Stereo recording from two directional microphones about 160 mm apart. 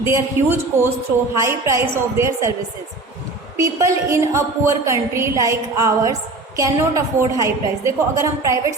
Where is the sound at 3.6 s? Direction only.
20° right (ahead or behind).